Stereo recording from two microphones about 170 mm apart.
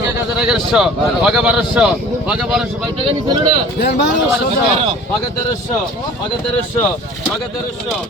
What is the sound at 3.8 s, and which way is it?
Speech, 80° left.